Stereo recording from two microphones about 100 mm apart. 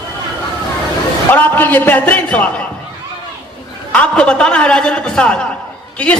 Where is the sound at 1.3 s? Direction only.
20° left (ahead or behind).